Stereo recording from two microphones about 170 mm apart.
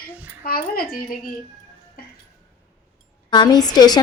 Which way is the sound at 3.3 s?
25° left (ahead or behind).